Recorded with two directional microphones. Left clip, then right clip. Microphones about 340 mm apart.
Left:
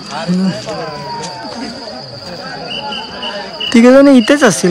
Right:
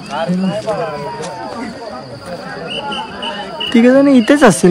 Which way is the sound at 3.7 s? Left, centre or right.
Centre.